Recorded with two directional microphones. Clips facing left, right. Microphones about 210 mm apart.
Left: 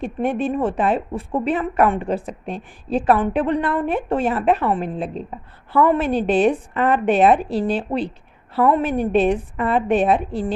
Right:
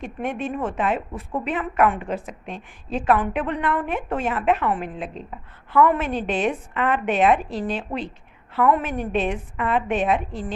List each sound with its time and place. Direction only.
0.0 s a woman's voice: 35° left (ahead or behind)